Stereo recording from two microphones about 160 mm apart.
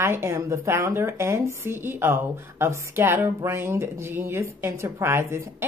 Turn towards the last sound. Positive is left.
turn(degrees=-15)  # may be behind; listen again after turning